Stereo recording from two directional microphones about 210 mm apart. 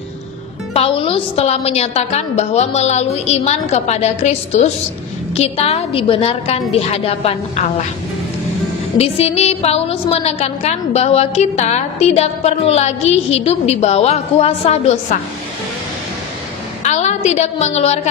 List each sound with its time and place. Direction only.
0.7 s a woman's voice: 25° left (ahead or behind)
8.9 s a woman's voice: 30° left (ahead or behind)
16.8 s a woman's voice: 35° left (ahead or behind)